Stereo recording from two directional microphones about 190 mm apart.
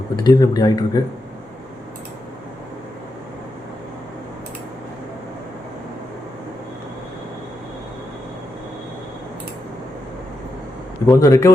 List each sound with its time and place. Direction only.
0.2 s speech: 20° left (ahead or behind)
11.0 s a man's voice: 15° left (ahead or behind)